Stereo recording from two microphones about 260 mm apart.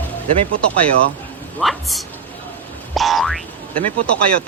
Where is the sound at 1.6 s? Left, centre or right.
Centre.